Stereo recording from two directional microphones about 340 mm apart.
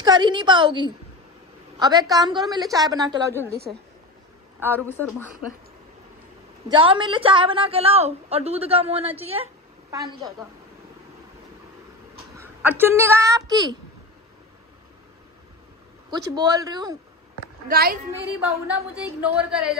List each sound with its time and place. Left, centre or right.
0.0 s a woman's voice: centre
4.6 s speech: centre
6.7 s a woman's voice: centre
12.4 s a woman's voice: centre
16.1 s a woman's voice: centre
17.6 s a woman's voice: right
19.2 s speech: centre